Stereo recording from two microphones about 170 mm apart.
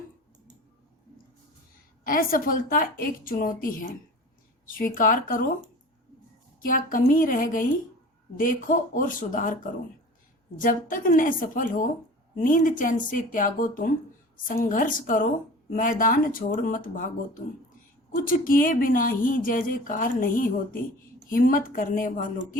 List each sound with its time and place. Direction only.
2.0 s a woman's voice: 55° left (ahead or behind)
6.6 s a woman's voice: 55° left (ahead or behind)
10.6 s speech: 50° left (ahead or behind)
18.1 s a woman's voice: 55° left (ahead or behind)